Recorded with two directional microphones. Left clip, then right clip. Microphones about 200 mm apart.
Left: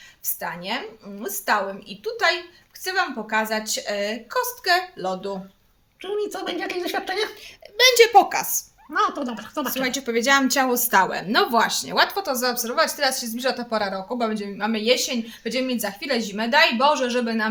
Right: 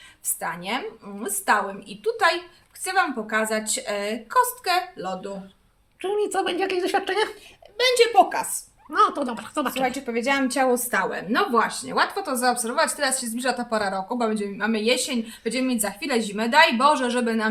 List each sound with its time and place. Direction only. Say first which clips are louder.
0.3 s a woman's voice: even; 5° left (ahead or behind)
4.9 s speech: left 3 dB; 30° left (ahead or behind)
6.0 s a woman's voice: right 3 dB; 15° right (ahead or behind)
7.8 s a woman's voice: left 3 dB; 45° left (ahead or behind)
8.9 s a woman's voice: right 2 dB; 5° right (ahead or behind)
9.8 s a woman's voice: left 5 dB; 50° left (ahead or behind)
12.1 s a woman's voice: right 1 dB; 20° left (ahead or behind); by 17.5 s 5° left (ahead or behind)